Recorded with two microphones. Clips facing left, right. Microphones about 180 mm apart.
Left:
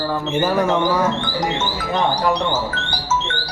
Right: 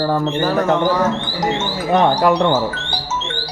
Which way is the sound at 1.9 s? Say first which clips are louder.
Right 6 dB; 65° right (ahead or behind).